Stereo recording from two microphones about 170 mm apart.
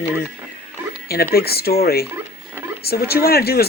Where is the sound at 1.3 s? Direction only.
65° left (ahead or behind).